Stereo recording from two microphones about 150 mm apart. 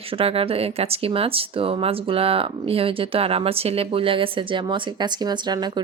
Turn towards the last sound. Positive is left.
turn(degrees=-30)  # may be behind; listen again after turning